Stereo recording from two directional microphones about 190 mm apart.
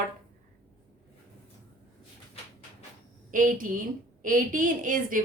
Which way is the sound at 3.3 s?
45° right (ahead or behind).